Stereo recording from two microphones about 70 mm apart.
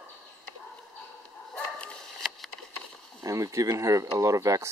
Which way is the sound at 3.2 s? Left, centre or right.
Right.